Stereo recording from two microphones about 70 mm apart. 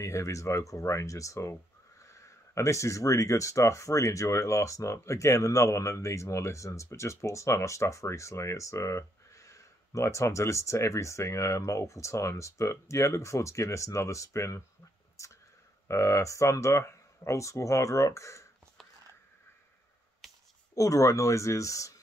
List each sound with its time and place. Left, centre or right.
0.0 s speech: left
15.9 s speech: left
20.2 s a sound: centre
20.7 s speech: left